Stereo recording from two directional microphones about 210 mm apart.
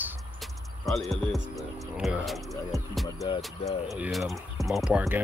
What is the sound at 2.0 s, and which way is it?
Music, centre (ahead or behind).